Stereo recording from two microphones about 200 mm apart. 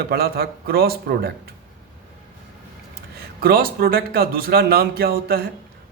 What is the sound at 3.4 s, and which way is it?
A man's voice, 45° right (ahead or behind).